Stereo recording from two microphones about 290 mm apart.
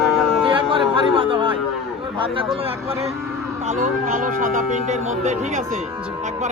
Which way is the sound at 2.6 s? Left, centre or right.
Centre.